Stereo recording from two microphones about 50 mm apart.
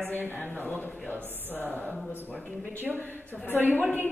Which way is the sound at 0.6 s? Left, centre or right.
Left.